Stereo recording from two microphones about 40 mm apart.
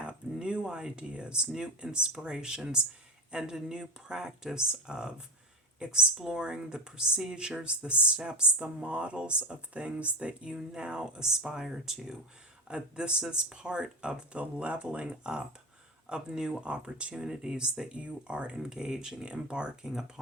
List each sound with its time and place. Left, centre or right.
0.0 s speech: right
12.6 s speech: right
14.3 s speech: right